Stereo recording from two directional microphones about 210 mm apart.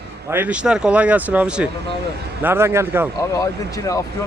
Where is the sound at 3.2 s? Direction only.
15° left (ahead or behind).